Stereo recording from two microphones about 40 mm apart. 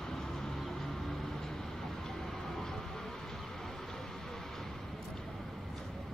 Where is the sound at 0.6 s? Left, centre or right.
Centre.